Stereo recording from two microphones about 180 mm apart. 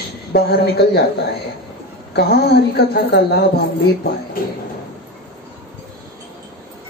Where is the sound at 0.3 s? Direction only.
65° left (ahead or behind).